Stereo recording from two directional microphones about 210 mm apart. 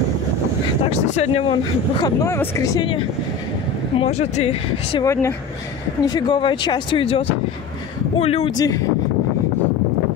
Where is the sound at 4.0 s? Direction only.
30° left (ahead or behind).